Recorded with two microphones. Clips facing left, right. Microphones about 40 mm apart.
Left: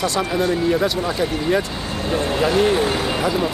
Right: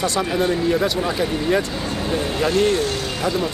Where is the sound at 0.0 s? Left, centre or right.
Centre.